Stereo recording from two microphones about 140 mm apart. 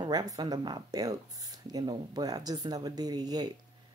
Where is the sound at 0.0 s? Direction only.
30° right (ahead or behind).